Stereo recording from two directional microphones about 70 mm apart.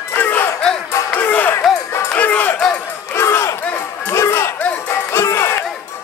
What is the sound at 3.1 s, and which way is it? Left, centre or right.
Battle cry, left.